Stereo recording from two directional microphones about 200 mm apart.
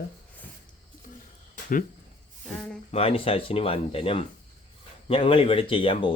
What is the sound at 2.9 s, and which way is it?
Speech, 30° left (ahead or behind).